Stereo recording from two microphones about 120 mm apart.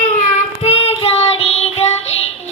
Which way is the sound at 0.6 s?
60° left (ahead or behind).